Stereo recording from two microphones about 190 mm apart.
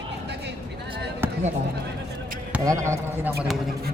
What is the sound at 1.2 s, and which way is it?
Basketball bounce, 10° right (ahead or behind).